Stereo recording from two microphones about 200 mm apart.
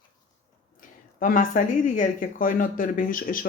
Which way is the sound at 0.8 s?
40° left (ahead or behind).